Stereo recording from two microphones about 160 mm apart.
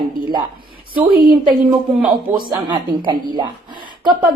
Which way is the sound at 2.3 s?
30° right (ahead or behind).